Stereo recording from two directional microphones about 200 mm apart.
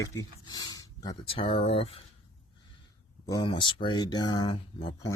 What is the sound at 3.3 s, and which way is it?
Speech, 25° left (ahead or behind).